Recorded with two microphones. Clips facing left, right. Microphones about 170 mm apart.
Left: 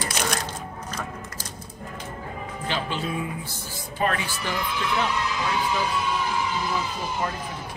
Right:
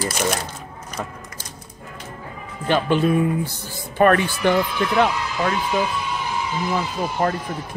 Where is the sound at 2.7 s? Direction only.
55° right (ahead or behind).